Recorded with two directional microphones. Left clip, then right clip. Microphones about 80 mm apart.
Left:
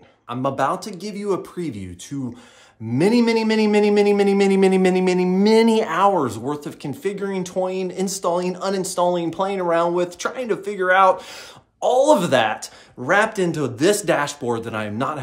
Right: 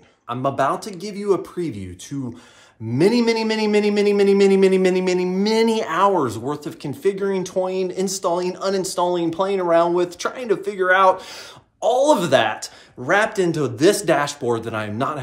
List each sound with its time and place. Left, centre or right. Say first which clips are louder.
0.3 s speech: right 1 dB; left
2.9 s speech: even; left